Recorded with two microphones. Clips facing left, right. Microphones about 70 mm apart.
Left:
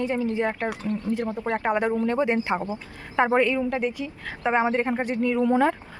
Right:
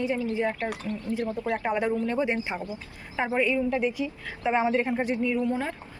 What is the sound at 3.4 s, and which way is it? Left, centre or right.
Speech, left.